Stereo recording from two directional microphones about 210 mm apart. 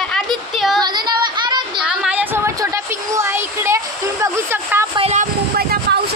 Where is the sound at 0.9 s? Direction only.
20° right (ahead or behind).